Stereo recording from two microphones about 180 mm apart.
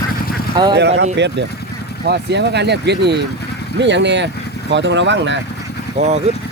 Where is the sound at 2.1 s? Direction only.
70° right (ahead or behind); by 5.4 s 85° right.